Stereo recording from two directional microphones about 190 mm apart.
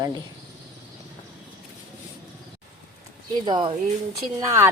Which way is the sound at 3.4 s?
25° right (ahead or behind).